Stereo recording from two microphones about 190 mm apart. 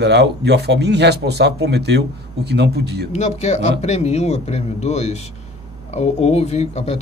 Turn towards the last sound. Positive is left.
turn(degrees=35)  # may be behind; listen again after turning